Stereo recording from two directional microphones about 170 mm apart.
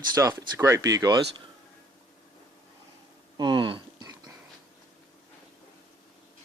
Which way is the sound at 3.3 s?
25° right (ahead or behind).